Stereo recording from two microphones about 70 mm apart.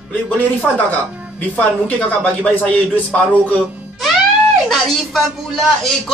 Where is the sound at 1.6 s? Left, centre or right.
Centre.